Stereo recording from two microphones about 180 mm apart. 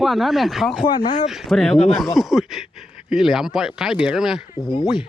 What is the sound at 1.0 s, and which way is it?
Speech, 50° left (ahead or behind).